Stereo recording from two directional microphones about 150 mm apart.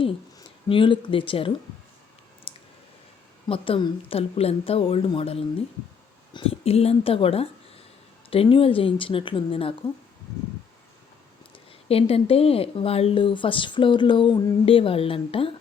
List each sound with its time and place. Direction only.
0.0 s speech: 35° left (ahead or behind)
2.5 s clicking: 35° left (ahead or behind)
3.5 s speech: 35° left (ahead or behind)
11.5 s speech: 40° left (ahead or behind)